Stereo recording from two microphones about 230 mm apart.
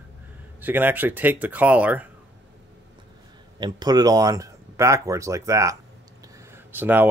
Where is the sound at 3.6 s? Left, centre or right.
Centre.